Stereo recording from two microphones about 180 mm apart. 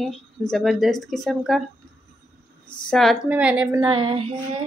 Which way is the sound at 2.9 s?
Centre (ahead or behind).